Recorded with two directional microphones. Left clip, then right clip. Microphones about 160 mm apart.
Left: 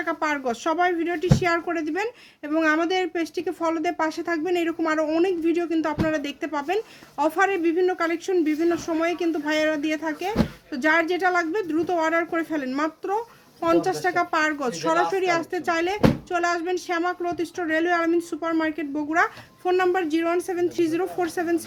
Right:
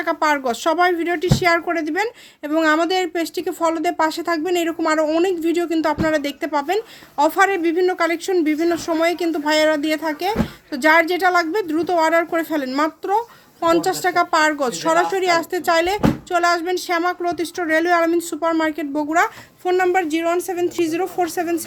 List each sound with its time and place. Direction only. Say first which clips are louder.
0.0 s speech: right 6 dB; 25° right (ahead or behind)